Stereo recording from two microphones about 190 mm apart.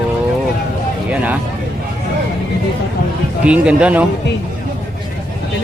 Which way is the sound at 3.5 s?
5° right (ahead or behind).